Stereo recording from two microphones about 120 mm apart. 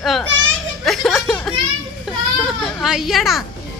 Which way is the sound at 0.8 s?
Centre (ahead or behind).